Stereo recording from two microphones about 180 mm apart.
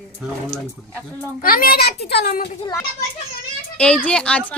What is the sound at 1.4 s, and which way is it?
A child's voice, 55° left (ahead or behind).